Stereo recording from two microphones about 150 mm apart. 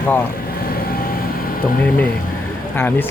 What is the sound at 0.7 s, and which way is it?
Vehicle, 75° left (ahead or behind).